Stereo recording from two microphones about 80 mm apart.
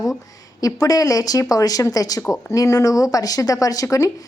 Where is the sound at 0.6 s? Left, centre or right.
Left.